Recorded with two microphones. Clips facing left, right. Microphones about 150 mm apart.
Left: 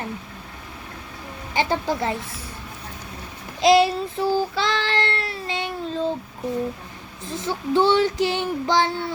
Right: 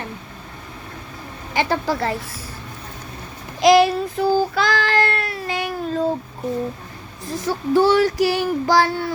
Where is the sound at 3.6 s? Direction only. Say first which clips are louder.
Right 3 dB; 30° left (ahead or behind).